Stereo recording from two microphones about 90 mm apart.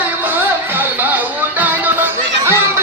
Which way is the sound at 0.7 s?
20° right (ahead or behind).